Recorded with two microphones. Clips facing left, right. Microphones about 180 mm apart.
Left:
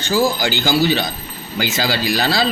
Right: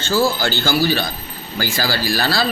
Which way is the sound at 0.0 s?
15° left (ahead or behind).